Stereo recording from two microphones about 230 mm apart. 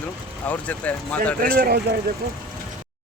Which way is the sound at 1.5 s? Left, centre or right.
Right.